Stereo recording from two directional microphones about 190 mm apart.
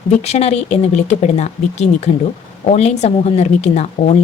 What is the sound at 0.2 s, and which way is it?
Speech, 35° left (ahead or behind).